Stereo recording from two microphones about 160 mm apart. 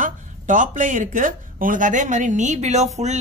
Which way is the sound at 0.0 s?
55° right (ahead or behind).